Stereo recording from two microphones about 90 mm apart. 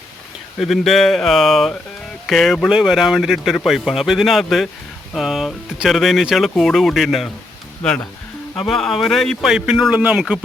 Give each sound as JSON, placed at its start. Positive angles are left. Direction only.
{"t": 0.6, "sound": "speech", "side_deg": 0}
{"t": 7.8, "sound": "speech", "side_deg": 10}